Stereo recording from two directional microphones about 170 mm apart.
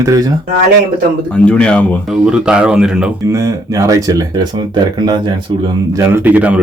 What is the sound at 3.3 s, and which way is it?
Speech, 20° right (ahead or behind).